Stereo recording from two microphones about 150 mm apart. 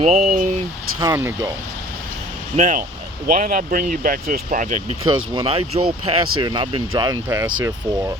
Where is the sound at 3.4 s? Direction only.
70° right (ahead or behind).